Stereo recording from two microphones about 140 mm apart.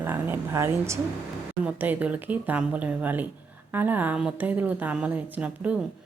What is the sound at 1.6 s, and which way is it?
A woman's voice, 10° right (ahead or behind).